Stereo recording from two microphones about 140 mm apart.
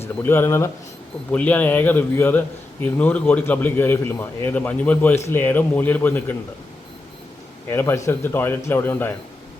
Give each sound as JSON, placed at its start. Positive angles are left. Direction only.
{"t": 0.2, "sound": "a man's voice", "side_deg": 15}
{"t": 7.7, "sound": "a man's voice", "side_deg": 15}